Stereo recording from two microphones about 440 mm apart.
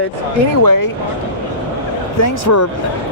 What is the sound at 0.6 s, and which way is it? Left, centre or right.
Speech, left.